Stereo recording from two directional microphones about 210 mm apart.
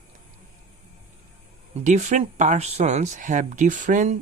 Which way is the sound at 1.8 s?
35° right (ahead or behind).